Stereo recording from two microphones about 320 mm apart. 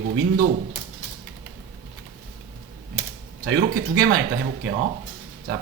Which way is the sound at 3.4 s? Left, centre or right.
Right.